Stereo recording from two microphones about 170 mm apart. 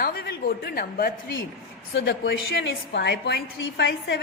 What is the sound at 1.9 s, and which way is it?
A woman's voice, 85° left.